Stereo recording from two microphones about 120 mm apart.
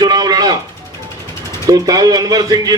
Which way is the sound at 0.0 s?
35° right (ahead or behind).